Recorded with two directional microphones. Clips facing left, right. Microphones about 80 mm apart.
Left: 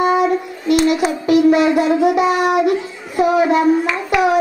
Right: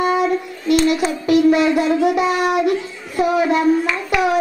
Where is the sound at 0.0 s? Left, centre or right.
Centre.